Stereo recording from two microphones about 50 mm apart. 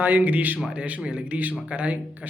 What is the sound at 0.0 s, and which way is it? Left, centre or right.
Speech, right.